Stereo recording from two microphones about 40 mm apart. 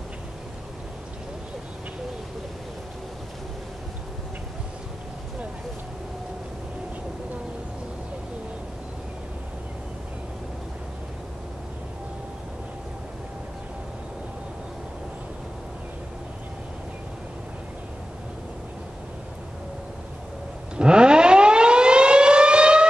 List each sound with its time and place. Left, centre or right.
20.7 s civil defense siren: right